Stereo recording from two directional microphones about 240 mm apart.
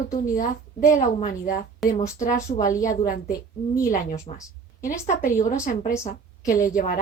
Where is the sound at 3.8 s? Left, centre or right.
Centre.